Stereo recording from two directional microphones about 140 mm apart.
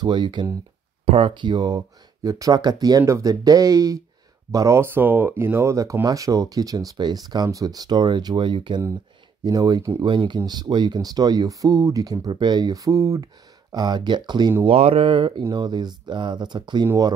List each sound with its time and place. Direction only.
0.0 s speech: 35° right (ahead or behind)
1.0 s speech: 45° right (ahead or behind)
14.6 s speech: 45° right (ahead or behind); by 17.1 s 25° right (ahead or behind)